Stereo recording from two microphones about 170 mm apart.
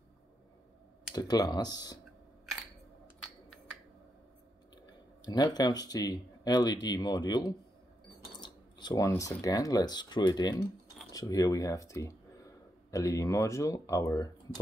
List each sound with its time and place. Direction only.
1.1 s speech: 20° left (ahead or behind)
4.8 s speech: 25° left (ahead or behind)